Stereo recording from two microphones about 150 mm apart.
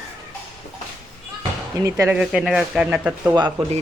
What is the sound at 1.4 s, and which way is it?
Basketball bounce, 20° right (ahead or behind).